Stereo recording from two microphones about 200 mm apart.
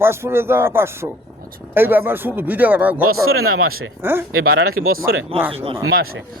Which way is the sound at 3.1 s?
90° right.